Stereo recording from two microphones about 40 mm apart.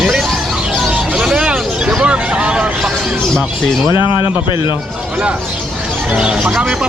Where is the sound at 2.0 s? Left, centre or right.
Right.